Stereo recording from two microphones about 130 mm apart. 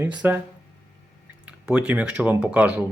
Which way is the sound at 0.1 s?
10° right (ahead or behind).